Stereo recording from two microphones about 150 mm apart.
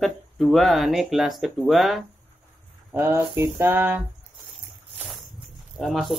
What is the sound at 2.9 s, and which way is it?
Speech, 15° right (ahead or behind).